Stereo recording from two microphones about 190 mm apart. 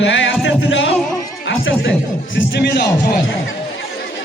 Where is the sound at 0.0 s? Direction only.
80° left.